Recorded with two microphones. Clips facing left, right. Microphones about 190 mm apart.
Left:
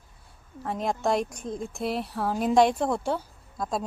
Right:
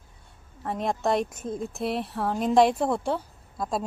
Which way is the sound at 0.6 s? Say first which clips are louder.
Even; centre (ahead or behind).